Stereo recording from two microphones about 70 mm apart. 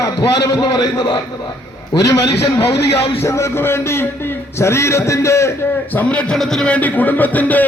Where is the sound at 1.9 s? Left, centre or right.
Left.